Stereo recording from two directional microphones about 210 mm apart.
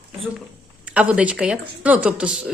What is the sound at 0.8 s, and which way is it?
Speech, 5° right (ahead or behind).